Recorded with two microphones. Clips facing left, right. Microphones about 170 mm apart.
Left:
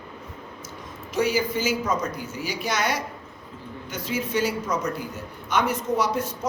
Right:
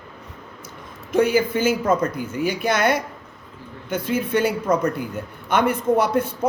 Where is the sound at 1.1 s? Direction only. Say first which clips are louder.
Right 5 dB; 55° right (ahead or behind).